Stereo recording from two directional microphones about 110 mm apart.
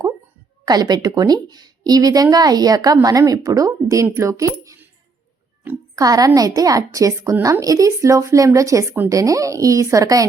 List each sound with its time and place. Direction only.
0.6 s speech: 35° right (ahead or behind)
6.0 s speech: 35° right (ahead or behind)